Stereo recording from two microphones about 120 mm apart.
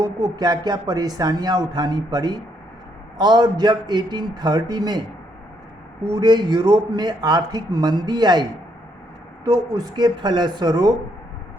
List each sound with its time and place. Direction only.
0.0 s a man's voice: 35° right (ahead or behind)
6.1 s a man's voice: 35° right (ahead or behind)
9.5 s a man's voice: 30° right (ahead or behind)